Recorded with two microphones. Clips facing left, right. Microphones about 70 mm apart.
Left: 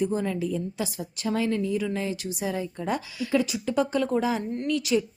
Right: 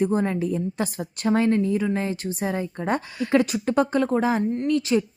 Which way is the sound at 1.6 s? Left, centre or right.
Right.